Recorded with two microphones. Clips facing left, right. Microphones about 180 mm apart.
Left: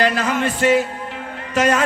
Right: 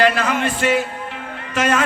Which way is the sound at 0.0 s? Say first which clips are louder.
Right 1 dB; 40° left (ahead or behind).